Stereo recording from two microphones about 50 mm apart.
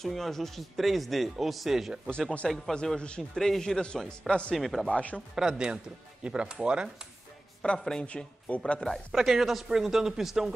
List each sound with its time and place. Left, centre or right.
0.0 s speech: centre
2.0 s a man's voice: centre
4.3 s speech: centre
4.6 s speech: centre
4.8 s speech: left
5.3 s speech: centre
7.6 s speech: centre
8.8 s speech: centre